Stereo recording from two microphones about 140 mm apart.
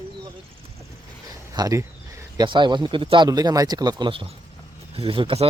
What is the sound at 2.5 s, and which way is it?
Speech, 35° right (ahead or behind).